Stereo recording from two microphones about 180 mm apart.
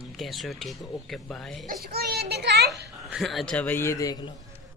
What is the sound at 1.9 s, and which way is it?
Speech, 60° right (ahead or behind).